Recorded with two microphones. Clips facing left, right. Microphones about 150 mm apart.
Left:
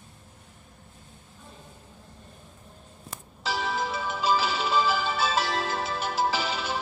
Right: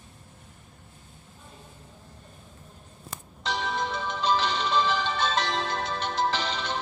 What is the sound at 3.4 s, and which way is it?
Music, 5° left (ahead or behind).